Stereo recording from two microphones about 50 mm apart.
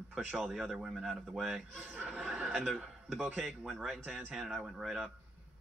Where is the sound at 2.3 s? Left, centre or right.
Right.